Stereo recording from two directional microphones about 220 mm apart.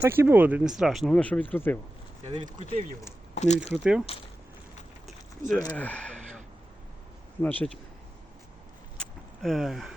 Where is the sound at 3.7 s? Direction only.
5° right (ahead or behind).